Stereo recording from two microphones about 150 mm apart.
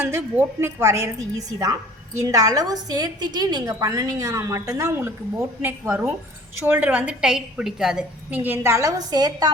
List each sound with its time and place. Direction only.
0.0 s a woman's voice: 15° right (ahead or behind)